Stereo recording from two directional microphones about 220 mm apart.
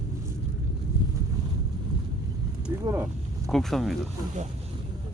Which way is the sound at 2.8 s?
10° right (ahead or behind).